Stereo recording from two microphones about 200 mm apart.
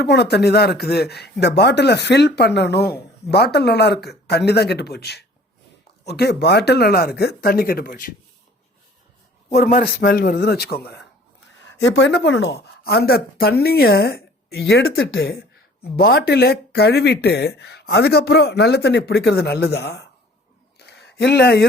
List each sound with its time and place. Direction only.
0.0 s a woman's voice: 55° left (ahead or behind)
9.6 s speech: 45° left (ahead or behind)
11.6 s speech: 65° left (ahead or behind)
15.2 s a woman's voice: 50° left (ahead or behind)
20.7 s a sound: 55° left (ahead or behind)